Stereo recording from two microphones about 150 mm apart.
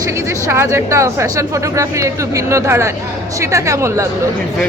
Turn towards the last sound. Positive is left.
turn(degrees=-20)  # may be behind; listen again after turning